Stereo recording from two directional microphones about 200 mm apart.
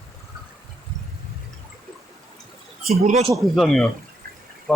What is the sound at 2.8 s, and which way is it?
Speech, 30° right (ahead or behind).